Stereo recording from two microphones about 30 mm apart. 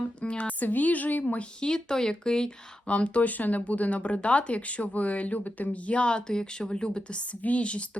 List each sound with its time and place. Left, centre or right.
0.2 s speech: left
0.4 s a woman's voice: left
1.6 s speech: left
2.8 s speech: left
3.2 s speech: left
3.7 s speech: left